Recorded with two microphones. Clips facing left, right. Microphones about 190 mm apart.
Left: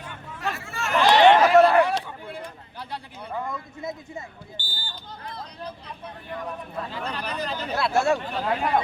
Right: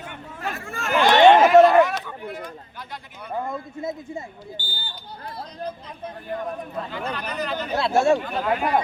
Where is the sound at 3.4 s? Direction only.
25° right (ahead or behind).